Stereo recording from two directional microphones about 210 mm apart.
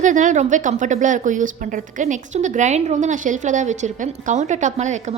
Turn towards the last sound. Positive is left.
turn(degrees=-35)  # may be behind; listen again after turning